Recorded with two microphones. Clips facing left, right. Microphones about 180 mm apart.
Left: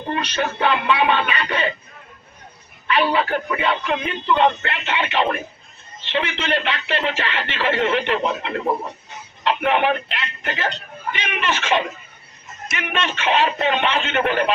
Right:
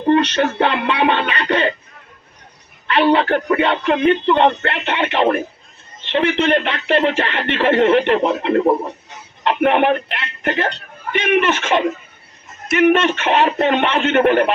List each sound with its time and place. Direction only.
0.1 s a man's voice: 60° right (ahead or behind)
2.9 s a man's voice: 60° right (ahead or behind)